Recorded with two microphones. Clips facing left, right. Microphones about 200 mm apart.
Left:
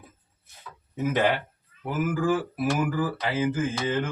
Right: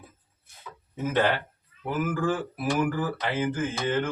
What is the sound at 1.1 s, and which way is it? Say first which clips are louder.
Mantra: even; 15° left (ahead or behind).